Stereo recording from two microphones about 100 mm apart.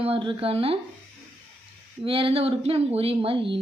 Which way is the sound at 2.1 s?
65° right (ahead or behind).